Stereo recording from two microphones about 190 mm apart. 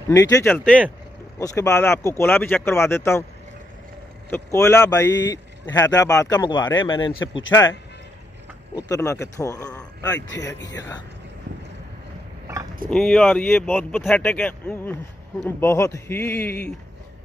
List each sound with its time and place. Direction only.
0.1 s a man's voice: 15° left (ahead or behind)
4.3 s a man's voice: 15° left (ahead or behind)
8.7 s a man's voice: 15° left (ahead or behind)
10.8 s a man's voice: 15° left (ahead or behind)
12.9 s a man's voice: centre (ahead or behind)